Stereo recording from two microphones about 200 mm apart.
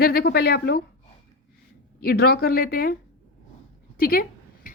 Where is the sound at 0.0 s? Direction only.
50° left (ahead or behind).